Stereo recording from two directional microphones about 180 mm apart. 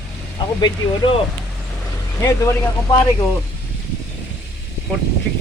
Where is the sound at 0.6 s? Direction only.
25° left (ahead or behind).